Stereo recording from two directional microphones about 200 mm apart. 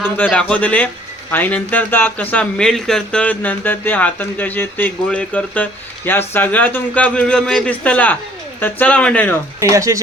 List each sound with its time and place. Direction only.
0.0 s speech: 5° left (ahead or behind)
9.6 s speech: 15° right (ahead or behind)